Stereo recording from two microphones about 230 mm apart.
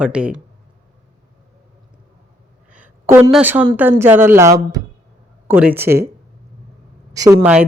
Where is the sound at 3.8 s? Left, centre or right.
Centre.